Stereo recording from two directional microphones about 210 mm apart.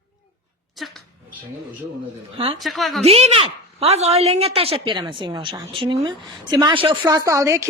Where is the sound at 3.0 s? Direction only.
30° right (ahead or behind); by 7.6 s 15° right (ahead or behind).